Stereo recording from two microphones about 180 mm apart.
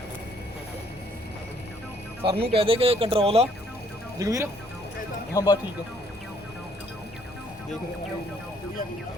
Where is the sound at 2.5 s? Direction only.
30° right (ahead or behind).